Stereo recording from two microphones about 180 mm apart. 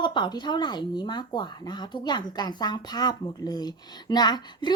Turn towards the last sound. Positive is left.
turn(degrees=25)  # may be behind; listen again after turning